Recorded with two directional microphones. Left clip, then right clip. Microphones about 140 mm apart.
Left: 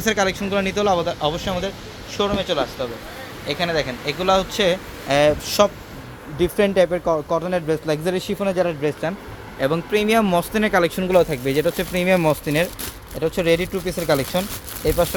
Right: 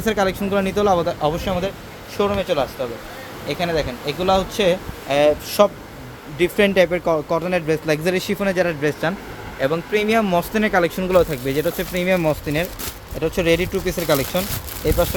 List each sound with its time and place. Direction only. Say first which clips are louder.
0.0 s speech: even; centre (ahead or behind)
3.4 s speech: even; 20° left (ahead or behind); by 5.3 s 5° left (ahead or behind)
5.5 s speech: right 1 dB; 5° right (ahead or behind)
9.6 s speech: even; 20° left (ahead or behind); by 12.6 s 35° left (ahead or behind)
13.1 s speech: right 1 dB; 15° left (ahead or behind)